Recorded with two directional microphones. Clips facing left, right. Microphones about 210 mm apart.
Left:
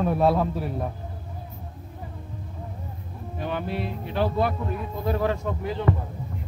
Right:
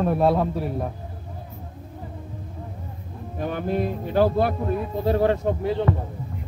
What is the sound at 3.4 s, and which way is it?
Speech, 45° right (ahead or behind).